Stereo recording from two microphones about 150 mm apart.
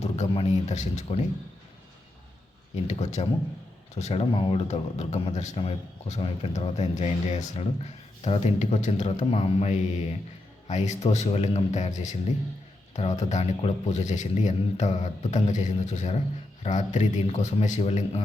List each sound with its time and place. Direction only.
0.0 s speech: 45° left (ahead or behind)
2.8 s a man's voice: 50° left (ahead or behind)